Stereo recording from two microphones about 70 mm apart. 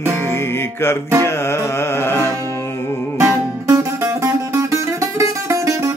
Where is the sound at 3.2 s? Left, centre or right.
Right.